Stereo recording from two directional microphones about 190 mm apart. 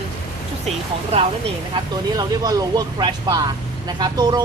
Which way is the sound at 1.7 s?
20° right (ahead or behind).